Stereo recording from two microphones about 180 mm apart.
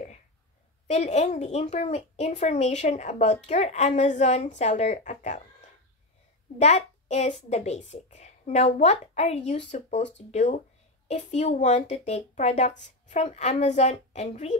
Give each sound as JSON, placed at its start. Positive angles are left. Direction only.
{"t": 0.8, "sound": "a woman's voice", "side_deg": 35}
{"t": 6.6, "sound": "a woman's voice", "side_deg": 40}